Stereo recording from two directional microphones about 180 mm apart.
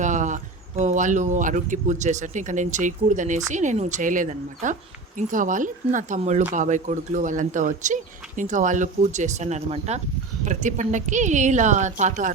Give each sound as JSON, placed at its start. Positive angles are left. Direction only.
{"t": 0.0, "sound": "speech", "side_deg": -45}